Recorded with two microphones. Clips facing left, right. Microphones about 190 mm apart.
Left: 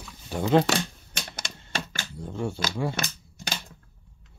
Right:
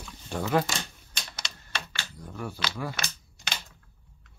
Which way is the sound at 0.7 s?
60° left (ahead or behind).